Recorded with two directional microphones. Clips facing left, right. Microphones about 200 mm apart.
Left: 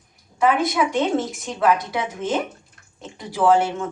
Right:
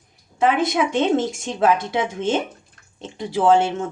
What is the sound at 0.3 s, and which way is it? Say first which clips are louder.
A woman's voice: even; 25° right (ahead or behind).